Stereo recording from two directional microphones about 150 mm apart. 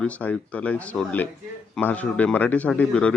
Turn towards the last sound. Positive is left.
turn(degrees=5)  # may be behind; listen again after turning